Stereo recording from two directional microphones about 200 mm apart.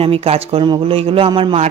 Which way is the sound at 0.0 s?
30° right (ahead or behind).